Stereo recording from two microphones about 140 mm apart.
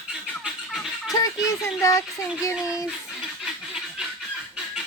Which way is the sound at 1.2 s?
25° left (ahead or behind).